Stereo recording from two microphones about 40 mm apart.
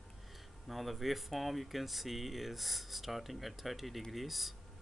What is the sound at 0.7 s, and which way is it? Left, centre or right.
Speech, centre.